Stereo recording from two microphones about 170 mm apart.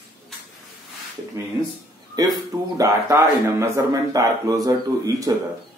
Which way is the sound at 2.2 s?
20° right (ahead or behind).